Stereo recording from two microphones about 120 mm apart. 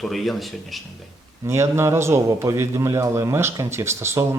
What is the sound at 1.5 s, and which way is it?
A man's voice, 25° right (ahead or behind).